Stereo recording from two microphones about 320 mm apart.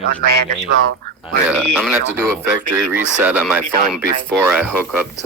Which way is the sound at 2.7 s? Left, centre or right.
Right.